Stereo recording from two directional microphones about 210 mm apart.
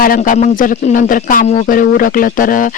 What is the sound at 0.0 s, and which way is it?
A man's voice, 40° left (ahead or behind).